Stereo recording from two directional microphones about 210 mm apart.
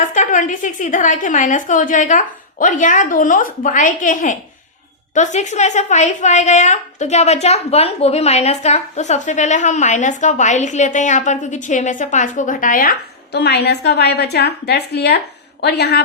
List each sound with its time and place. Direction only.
0.1 s a woman's voice: 35° left (ahead or behind)